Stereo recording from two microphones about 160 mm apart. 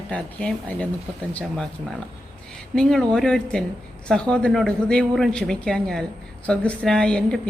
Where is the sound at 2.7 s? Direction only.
5° left (ahead or behind).